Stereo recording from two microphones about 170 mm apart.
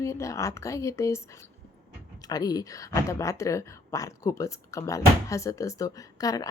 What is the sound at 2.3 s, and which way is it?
Speech, 20° left (ahead or behind).